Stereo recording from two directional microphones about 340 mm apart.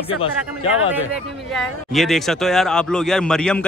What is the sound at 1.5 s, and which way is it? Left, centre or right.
Speech, centre.